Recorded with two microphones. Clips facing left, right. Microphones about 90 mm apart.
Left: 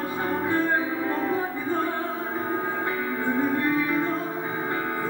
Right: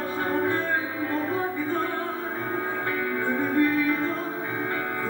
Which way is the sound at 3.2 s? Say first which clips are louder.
Right 1 dB; 15° left (ahead or behind).